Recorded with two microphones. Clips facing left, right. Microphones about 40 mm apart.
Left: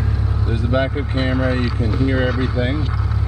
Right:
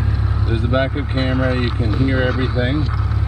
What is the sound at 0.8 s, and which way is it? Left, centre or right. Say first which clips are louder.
Speech: even; centre.